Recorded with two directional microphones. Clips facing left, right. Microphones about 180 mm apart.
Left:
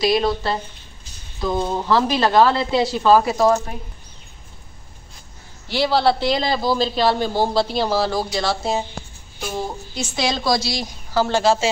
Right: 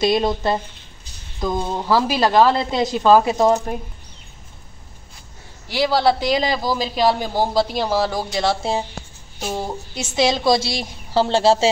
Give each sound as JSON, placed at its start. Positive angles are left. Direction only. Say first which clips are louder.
{"t": 0.0, "sound": "a woman's voice", "louder": "right 1 dB", "side_deg": -20}
{"t": 5.7, "sound": "speech", "louder": "even", "side_deg": -10}
{"t": 10.1, "sound": "a woman's voice", "louder": "right 4 dB", "side_deg": -20}